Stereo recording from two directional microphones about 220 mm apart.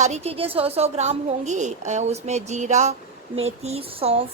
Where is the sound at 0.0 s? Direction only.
30° right (ahead or behind).